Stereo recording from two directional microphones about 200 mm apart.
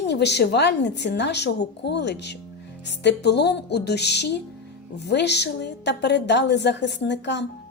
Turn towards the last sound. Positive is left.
turn(degrees=60)  # may be behind; listen again after turning